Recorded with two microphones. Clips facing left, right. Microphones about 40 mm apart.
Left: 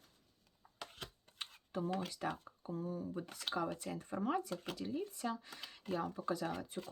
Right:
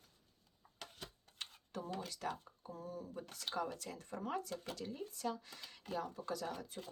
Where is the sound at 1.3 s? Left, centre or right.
Centre.